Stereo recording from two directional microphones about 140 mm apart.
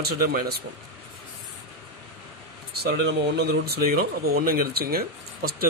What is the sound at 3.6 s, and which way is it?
Speech, 90° right.